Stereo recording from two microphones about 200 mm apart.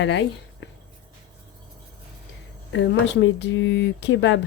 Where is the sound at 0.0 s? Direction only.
60° left (ahead or behind).